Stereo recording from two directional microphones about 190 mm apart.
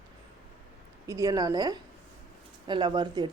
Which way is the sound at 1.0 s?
15° right (ahead or behind).